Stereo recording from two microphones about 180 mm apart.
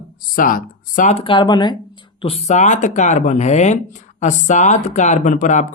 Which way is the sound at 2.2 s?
35° left (ahead or behind).